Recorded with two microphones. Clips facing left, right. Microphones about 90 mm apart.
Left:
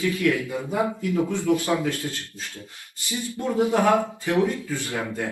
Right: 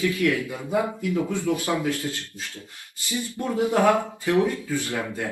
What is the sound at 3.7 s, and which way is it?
Speech, 20° left (ahead or behind).